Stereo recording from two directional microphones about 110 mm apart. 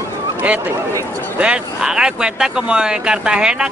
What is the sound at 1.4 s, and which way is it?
Speech, 10° right (ahead or behind).